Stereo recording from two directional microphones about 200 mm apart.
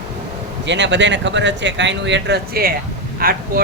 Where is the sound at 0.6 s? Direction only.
60° right (ahead or behind).